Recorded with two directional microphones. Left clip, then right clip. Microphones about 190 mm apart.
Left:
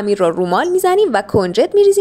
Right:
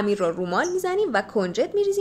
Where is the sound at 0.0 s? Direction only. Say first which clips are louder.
Left 9 dB; 40° left (ahead or behind).